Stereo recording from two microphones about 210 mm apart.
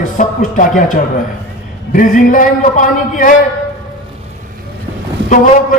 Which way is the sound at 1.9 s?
40° left (ahead or behind).